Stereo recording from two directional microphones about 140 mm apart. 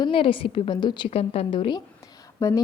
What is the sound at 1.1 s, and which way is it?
A woman's voice, 45° left (ahead or behind).